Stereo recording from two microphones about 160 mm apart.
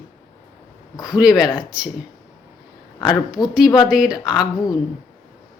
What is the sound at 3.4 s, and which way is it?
Speech, 5° right (ahead or behind).